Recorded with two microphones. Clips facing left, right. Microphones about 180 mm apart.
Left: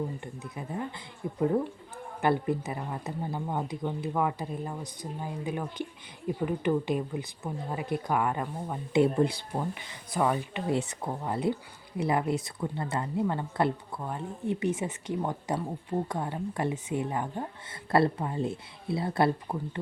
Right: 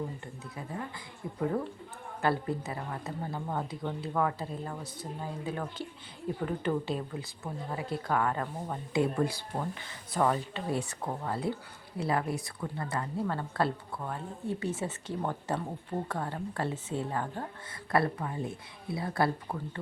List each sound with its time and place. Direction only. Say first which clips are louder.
1.2 s a woman's voice: left 5 dB; 25° left (ahead or behind)
8.9 s a woman's voice: left 5 dB; 25° left (ahead or behind)
17.9 s speech: left 4 dB; 25° left (ahead or behind)